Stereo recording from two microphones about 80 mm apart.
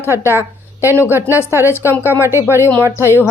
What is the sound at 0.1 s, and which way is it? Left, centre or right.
Speech, right.